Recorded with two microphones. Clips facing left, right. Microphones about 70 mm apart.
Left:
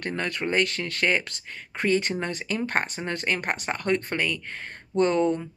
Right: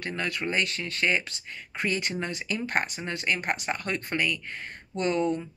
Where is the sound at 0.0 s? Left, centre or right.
Left.